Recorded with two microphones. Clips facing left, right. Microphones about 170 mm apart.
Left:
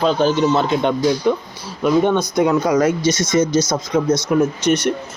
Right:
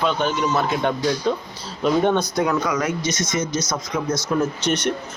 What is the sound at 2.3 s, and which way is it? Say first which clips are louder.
Speech: left 6 dB; 25° left (ahead or behind).